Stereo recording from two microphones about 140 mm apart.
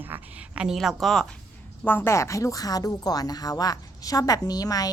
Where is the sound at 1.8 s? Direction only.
15° left (ahead or behind).